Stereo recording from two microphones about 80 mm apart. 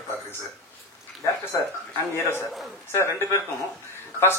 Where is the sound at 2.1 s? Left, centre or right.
Left.